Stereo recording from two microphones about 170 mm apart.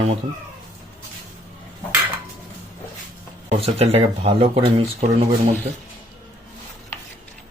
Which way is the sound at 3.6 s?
35° right (ahead or behind).